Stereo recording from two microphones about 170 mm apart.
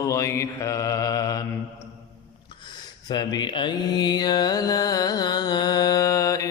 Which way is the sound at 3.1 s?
25° left (ahead or behind).